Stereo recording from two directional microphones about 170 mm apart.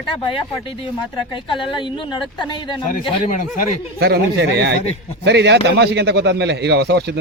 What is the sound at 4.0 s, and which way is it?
A man's voice, 75° right (ahead or behind).